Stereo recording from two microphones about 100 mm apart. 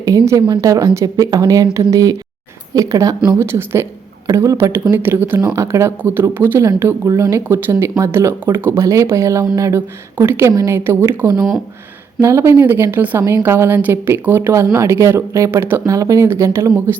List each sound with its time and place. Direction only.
0.6 s speech: 35° right (ahead or behind)
3.3 s a woman's voice: 25° right (ahead or behind)